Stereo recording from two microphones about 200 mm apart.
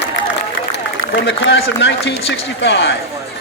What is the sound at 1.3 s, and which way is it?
Speech, 65° left (ahead or behind).